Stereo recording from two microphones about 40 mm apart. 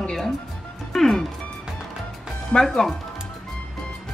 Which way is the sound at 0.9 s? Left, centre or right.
Centre.